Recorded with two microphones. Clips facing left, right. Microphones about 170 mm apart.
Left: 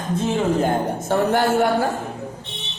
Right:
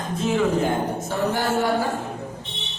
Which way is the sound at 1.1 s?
55° left (ahead or behind).